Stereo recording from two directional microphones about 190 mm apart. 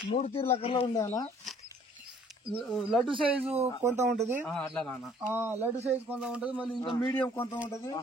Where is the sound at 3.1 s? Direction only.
25° right (ahead or behind).